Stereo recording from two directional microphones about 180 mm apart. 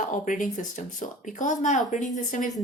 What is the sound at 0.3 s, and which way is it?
A woman's voice, 45° left (ahead or behind).